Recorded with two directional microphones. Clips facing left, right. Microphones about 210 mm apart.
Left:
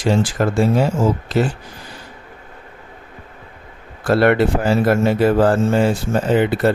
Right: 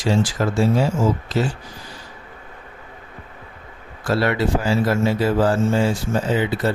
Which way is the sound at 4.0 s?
55° left (ahead or behind).